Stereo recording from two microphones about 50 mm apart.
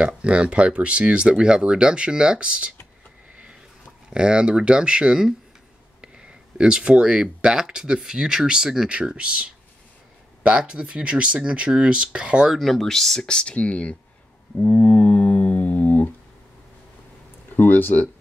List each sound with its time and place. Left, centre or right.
0.0 s speech: right
4.1 s speech: centre
10.7 s speech: right
12.5 s speech: centre; by 13.9 s left
14.6 s a sound: left
17.6 s speech: left